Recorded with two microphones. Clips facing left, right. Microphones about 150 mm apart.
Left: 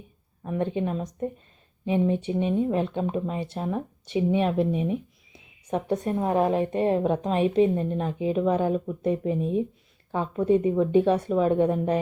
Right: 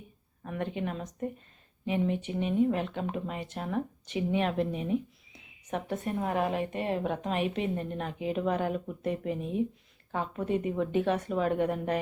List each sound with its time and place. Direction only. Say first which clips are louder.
0.4 s a woman's voice: left 7 dB; 25° left (ahead or behind)
5.9 s a woman's voice: left 7 dB; 35° left (ahead or behind)